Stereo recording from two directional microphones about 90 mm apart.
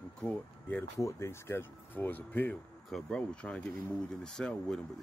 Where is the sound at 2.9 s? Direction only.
10° left (ahead or behind).